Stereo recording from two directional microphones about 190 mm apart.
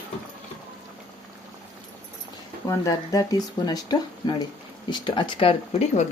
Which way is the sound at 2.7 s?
20° left (ahead or behind).